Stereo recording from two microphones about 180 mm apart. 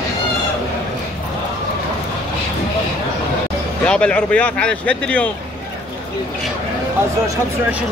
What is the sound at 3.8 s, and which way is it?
Speech, 5° left (ahead or behind).